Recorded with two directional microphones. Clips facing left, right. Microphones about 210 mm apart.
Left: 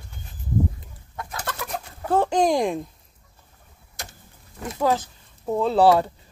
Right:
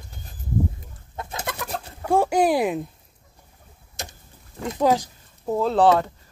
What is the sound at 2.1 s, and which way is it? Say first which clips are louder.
Speech: right 1 dB; 10° right (ahead or behind).